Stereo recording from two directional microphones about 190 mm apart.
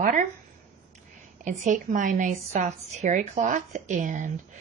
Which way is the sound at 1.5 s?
40° right (ahead or behind).